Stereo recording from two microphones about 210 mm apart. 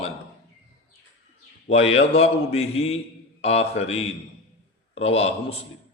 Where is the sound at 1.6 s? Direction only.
30° left (ahead or behind).